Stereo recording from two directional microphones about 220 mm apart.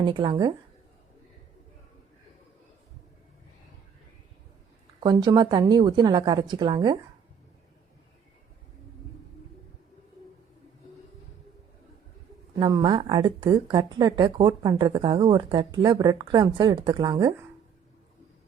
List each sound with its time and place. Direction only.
0.0 s speech: 20° right (ahead or behind)
4.9 s speech: 20° right (ahead or behind)
12.5 s speech: 25° right (ahead or behind)